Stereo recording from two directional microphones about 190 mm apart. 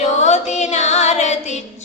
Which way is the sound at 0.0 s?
40° left (ahead or behind).